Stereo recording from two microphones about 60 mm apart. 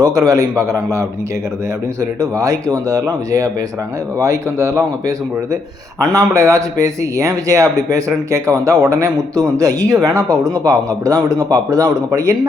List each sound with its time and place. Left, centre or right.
0.0 s a man's voice: right